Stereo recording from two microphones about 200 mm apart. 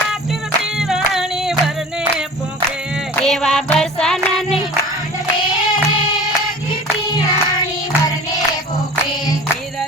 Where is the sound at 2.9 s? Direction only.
Centre (ahead or behind).